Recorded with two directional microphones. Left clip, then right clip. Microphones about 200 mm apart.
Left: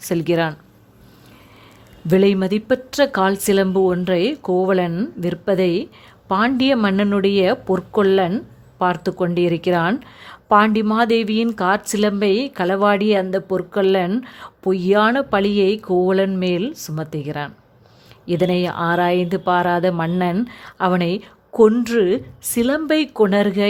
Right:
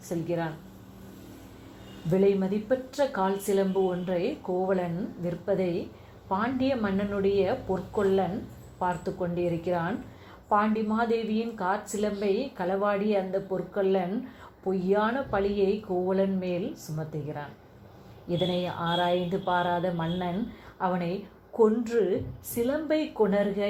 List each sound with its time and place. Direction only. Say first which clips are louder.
0.1 s speech: left 12 dB; 50° left (ahead or behind)
2.0 s speech: left 8 dB; 45° left (ahead or behind)